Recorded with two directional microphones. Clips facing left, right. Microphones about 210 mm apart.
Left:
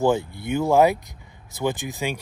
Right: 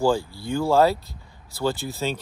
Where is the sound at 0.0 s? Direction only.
20° left (ahead or behind).